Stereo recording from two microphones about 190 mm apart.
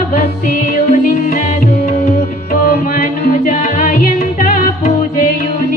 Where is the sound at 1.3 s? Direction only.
40° left (ahead or behind).